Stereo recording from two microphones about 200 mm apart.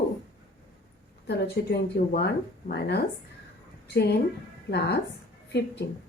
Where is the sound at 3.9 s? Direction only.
55° left (ahead or behind).